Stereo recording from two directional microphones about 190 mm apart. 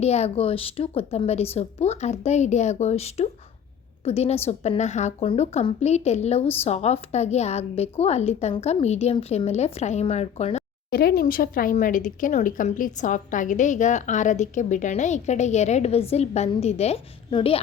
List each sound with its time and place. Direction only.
0.0 s speech: 35° left (ahead or behind)
10.9 s speech: 50° left (ahead or behind); by 17.6 s 30° left (ahead or behind)